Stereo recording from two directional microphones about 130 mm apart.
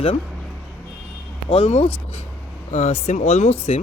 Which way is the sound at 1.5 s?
50° left (ahead or behind).